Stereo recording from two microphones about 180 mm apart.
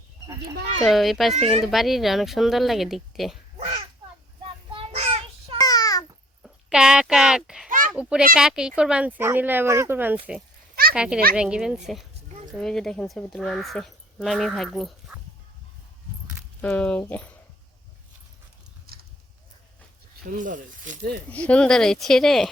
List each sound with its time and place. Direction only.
0.9 s speech: centre (ahead or behind)
3.6 s a sound: 30° right (ahead or behind)
4.7 s child singing: 35° right (ahead or behind)
5.5 s babbling: 20° left (ahead or behind)
6.4 s speech: 5° right (ahead or behind)
16.6 s speech: 10° left (ahead or behind)
18.9 s horse: 60° right (ahead or behind)
20.2 s speech: 50° right (ahead or behind)
21.3 s speech: 5° left (ahead or behind)